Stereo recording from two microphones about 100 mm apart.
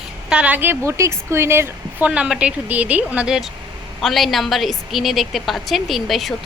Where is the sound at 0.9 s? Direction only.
30° right (ahead or behind).